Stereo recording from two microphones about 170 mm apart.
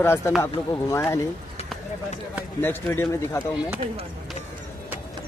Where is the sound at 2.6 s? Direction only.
15° left (ahead or behind).